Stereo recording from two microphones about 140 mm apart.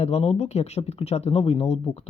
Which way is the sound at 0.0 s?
50° left (ahead or behind).